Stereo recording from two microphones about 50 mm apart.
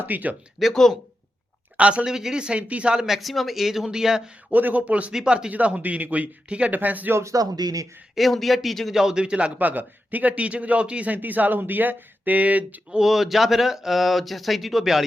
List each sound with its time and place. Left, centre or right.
0.0 s a man's voice: right
0.7 s speech: centre
1.7 s speech: right
2.0 s speech: centre
2.9 s speech: centre
3.2 s speech: centre
4.5 s a man's voice: right
5.1 s speech: centre
5.5 s a man's voice: right
7.1 s speech: right
8.1 s speech: centre
9.0 s speech: centre
9.6 s a man's voice: right
13.0 s speech: centre